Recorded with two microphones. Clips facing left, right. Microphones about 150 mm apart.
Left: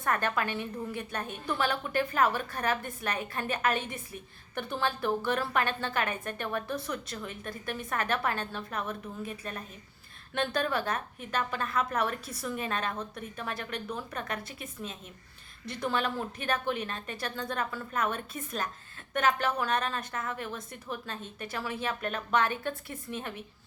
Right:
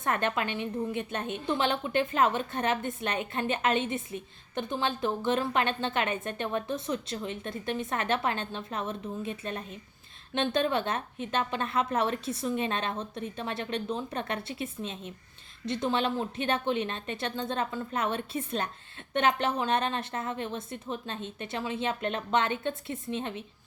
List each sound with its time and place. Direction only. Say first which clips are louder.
0.0 s a woman's voice: right 1 dB; 20° right (ahead or behind)